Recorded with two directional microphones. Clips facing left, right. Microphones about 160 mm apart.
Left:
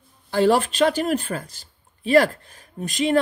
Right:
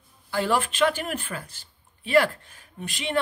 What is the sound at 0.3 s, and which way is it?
Speech, 35° left (ahead or behind).